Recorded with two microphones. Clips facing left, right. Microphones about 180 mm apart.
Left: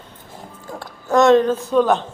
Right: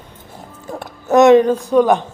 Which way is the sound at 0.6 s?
20° right (ahead or behind).